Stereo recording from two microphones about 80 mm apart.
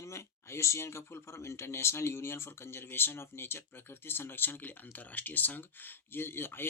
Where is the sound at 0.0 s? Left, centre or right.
Left.